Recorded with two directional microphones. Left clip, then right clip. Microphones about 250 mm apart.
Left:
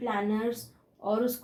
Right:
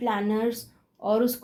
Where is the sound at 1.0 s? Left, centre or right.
Right.